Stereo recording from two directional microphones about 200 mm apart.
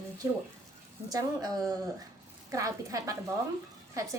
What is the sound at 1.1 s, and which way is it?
A woman's voice, 20° right (ahead or behind).